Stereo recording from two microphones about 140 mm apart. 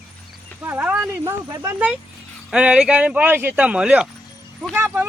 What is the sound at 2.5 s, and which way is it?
A man's voice, 5° right (ahead or behind).